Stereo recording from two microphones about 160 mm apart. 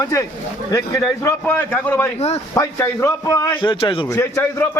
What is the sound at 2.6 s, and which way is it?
A man's voice, 15° left (ahead or behind).